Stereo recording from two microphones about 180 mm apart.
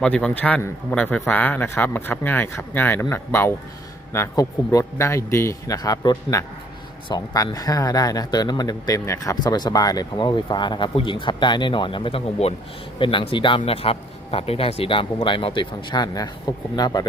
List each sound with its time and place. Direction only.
0.0 s a man's voice: 5° left (ahead or behind); by 17.1 s 20° left (ahead or behind)